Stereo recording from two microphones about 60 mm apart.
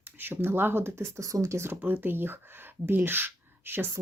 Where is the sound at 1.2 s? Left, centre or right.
Right.